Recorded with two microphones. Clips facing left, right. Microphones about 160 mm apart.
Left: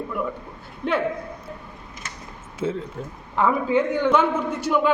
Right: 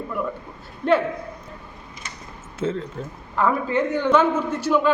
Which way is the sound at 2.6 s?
10° left (ahead or behind).